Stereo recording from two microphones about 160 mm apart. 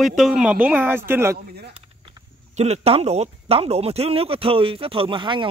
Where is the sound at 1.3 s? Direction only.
85° right.